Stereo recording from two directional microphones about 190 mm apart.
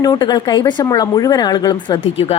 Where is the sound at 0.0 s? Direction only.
20° left (ahead or behind).